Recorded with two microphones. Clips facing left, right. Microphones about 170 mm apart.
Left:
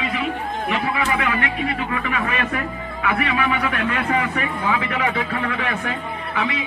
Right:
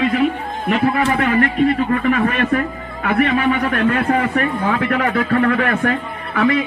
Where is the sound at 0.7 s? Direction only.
50° right (ahead or behind).